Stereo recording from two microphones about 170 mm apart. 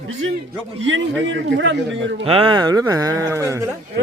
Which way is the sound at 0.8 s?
90° right.